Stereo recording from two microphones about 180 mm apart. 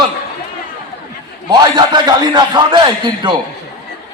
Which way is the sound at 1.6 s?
25° right (ahead or behind).